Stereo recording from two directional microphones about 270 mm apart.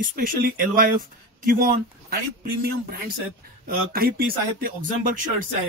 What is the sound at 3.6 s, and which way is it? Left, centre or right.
A man's voice, right.